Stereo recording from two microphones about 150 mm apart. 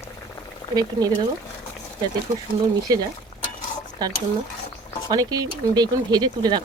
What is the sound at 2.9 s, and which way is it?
Speech, 25° right (ahead or behind).